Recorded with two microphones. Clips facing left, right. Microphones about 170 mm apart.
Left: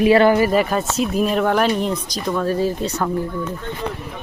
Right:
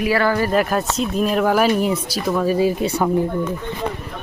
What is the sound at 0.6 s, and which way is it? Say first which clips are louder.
Speech: even; centre (ahead or behind).